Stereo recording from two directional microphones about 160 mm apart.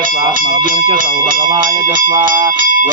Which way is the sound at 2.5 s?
60° right (ahead or behind).